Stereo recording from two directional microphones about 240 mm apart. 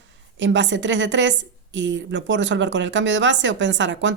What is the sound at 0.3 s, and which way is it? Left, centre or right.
A woman's voice, right.